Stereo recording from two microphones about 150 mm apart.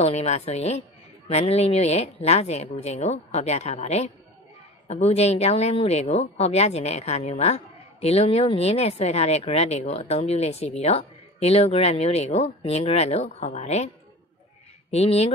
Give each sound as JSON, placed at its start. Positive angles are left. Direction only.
{"t": 0.0, "sound": "a woman's voice", "side_deg": 45}
{"t": 14.9, "sound": "a woman's voice", "side_deg": 45}